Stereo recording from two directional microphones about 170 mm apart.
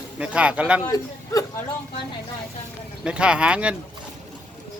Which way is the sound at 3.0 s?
5° right (ahead or behind).